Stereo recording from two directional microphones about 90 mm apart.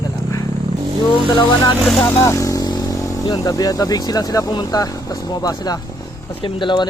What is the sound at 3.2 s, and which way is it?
Speech, 45° left (ahead or behind).